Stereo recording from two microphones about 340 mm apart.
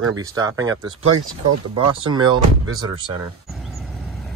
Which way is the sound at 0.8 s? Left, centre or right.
Right.